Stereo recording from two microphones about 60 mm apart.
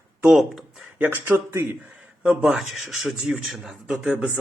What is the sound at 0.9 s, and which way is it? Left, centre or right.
Speech, right.